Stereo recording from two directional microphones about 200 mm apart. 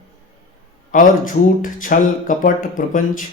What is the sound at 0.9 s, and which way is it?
Speech, 40° left (ahead or behind).